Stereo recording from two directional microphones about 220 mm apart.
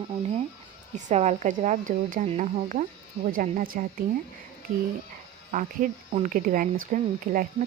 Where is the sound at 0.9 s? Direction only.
30° right (ahead or behind).